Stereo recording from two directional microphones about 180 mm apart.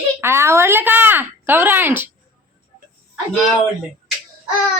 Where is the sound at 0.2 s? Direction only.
15° right (ahead or behind).